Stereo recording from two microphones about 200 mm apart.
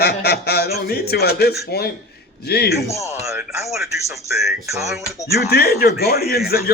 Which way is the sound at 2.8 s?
15° left (ahead or behind).